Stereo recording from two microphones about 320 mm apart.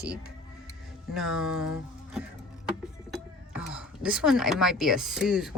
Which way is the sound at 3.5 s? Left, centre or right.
Centre.